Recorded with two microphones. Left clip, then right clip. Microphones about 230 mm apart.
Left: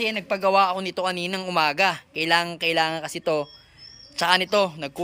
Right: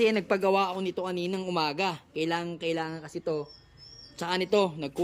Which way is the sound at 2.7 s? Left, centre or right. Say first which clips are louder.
Left 11 dB; left.